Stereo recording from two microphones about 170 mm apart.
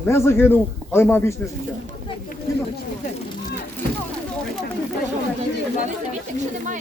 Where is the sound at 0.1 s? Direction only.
15° left (ahead or behind).